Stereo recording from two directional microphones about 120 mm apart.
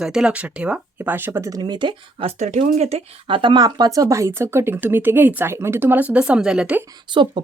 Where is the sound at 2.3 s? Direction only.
70° right (ahead or behind).